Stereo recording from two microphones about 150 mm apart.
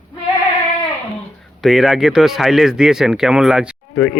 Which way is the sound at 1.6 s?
Centre (ahead or behind).